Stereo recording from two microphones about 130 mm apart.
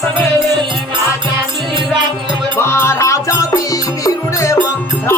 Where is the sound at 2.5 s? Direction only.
20° left (ahead or behind).